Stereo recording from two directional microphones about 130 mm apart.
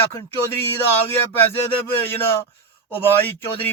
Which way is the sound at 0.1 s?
20° left (ahead or behind).